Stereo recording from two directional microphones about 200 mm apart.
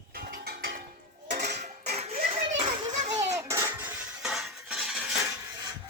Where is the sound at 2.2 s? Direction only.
30° right (ahead or behind); by 3.8 s 15° right (ahead or behind).